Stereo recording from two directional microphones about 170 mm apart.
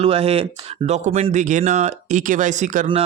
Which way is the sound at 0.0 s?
35° right (ahead or behind).